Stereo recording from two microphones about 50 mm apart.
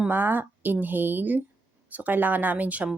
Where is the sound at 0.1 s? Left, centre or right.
Right.